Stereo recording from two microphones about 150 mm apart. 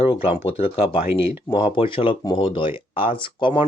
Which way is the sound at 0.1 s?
40° left (ahead or behind).